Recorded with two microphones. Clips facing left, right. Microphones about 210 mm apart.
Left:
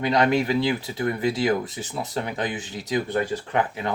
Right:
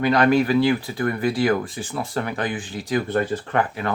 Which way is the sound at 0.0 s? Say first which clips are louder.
Right 3 dB; 20° left (ahead or behind).